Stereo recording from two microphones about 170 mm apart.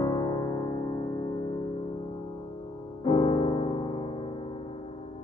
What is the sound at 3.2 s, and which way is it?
Music, 40° left (ahead or behind).